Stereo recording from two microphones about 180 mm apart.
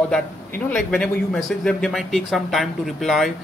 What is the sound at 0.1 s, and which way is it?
A man's voice, 5° left (ahead or behind).